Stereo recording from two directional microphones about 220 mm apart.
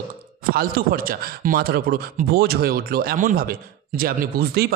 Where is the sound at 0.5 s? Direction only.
40° right (ahead or behind).